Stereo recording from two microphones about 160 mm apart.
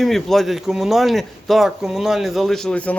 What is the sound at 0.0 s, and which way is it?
A man's voice, centre (ahead or behind).